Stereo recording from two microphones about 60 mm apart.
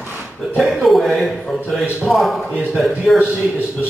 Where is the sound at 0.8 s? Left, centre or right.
Centre.